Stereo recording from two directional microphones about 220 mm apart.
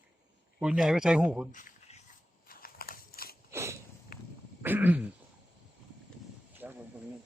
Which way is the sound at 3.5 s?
10° right (ahead or behind).